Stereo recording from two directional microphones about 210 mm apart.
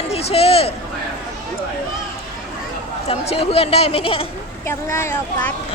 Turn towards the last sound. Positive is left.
turn(degrees=15)  # may be behind; listen again after turning